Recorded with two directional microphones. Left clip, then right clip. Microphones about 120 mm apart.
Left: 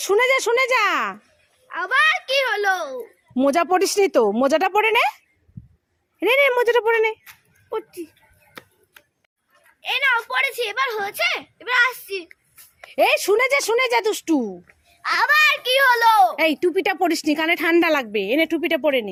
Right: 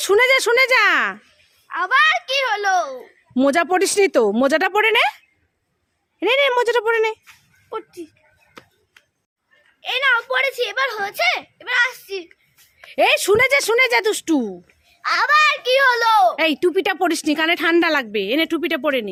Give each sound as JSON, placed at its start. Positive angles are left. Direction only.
{"t": 0.0, "sound": "a child's voice", "side_deg": -25}
{"t": 8.6, "sound": "tick-tock", "side_deg": 75}
{"t": 9.8, "sound": "speech", "side_deg": -35}
{"t": 11.6, "sound": "a child's voice", "side_deg": -25}
{"t": 15.0, "sound": "a woman's voice", "side_deg": -5}